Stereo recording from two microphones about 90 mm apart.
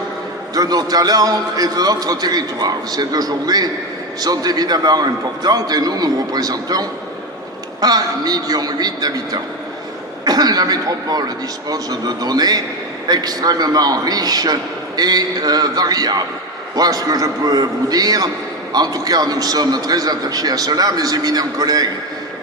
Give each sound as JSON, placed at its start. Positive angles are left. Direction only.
{"t": 0.5, "sound": "a man's voice", "side_deg": -45}